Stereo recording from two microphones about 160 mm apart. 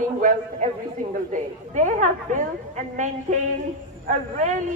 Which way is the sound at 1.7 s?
50° right (ahead or behind).